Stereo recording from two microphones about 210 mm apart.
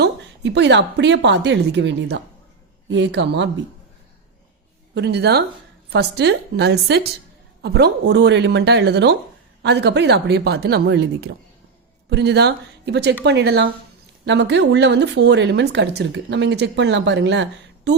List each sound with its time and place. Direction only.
0.0 s a woman's voice: 55° right (ahead or behind)
4.9 s a woman's voice: 50° right (ahead or behind)